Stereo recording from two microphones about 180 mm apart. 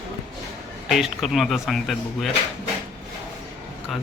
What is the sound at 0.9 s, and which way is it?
Speech, centre (ahead or behind).